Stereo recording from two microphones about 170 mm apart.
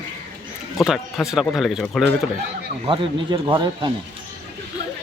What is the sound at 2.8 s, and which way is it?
Speech, 30° right (ahead or behind).